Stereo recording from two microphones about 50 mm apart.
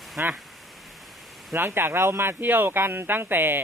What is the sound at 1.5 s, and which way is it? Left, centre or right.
Speech, right.